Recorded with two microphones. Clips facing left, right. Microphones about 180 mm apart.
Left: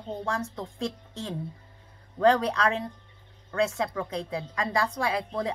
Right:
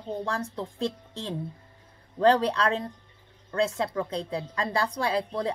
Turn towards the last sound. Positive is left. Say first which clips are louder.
# right 1 dB
turn(degrees=-30)  # may be behind; listen again after turning